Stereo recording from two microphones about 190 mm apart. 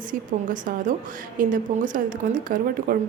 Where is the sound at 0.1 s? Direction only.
45° right (ahead or behind).